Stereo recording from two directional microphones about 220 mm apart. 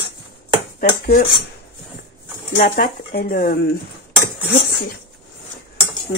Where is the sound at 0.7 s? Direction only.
40° left (ahead or behind).